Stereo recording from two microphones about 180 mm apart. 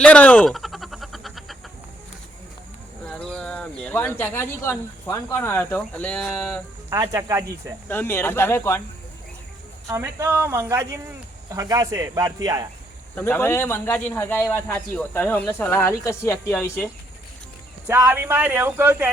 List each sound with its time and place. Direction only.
0.0 s a sound: 5° left (ahead or behind)
3.1 s speech: 5° left (ahead or behind)
6.9 s speech: 20° right (ahead or behind)
7.9 s speech: 10° left (ahead or behind)
9.8 s speech: 15° right (ahead or behind)
13.1 s speech: 10° left (ahead or behind)
17.8 s speech: 15° right (ahead or behind)